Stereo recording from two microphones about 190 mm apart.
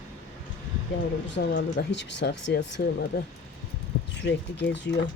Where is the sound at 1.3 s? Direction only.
70° left (ahead or behind).